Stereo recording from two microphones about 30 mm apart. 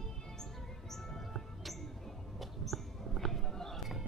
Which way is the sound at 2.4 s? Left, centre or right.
Centre.